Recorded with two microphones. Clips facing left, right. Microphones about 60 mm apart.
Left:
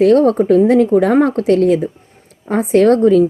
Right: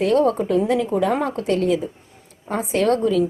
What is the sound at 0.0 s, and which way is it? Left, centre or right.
A woman's voice, left.